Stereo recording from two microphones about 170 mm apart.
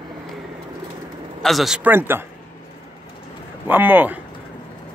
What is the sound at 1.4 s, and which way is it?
Speech, centre (ahead or behind).